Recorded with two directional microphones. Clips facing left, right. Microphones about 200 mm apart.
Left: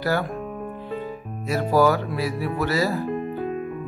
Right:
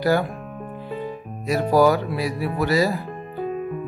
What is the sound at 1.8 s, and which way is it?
Speech, 15° right (ahead or behind).